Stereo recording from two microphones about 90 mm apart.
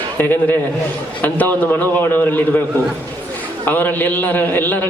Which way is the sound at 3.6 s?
20° left (ahead or behind).